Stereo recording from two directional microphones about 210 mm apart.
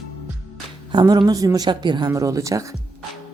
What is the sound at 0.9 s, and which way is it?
A woman's voice, 20° right (ahead or behind).